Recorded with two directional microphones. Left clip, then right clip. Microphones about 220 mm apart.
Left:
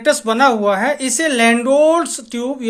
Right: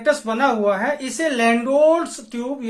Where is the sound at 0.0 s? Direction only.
40° left (ahead or behind).